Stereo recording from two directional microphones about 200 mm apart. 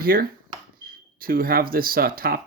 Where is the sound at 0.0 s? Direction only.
45° right (ahead or behind).